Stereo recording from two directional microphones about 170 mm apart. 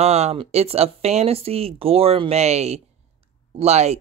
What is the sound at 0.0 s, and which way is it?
Speech, 40° right (ahead or behind).